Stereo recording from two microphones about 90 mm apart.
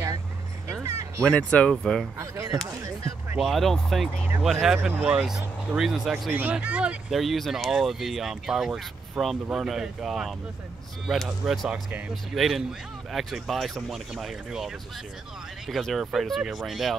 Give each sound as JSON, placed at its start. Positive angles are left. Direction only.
{"t": 0.8, "sound": "fowl", "side_deg": -35}
{"t": 1.2, "sound": "speech", "side_deg": 15}
{"t": 2.1, "sound": "speech", "side_deg": -35}
{"t": 3.3, "sound": "speech", "side_deg": 0}
{"t": 4.8, "sound": "speech", "side_deg": -15}
{"t": 6.5, "sound": "speech", "side_deg": -15}
{"t": 7.1, "sound": "speech", "side_deg": 0}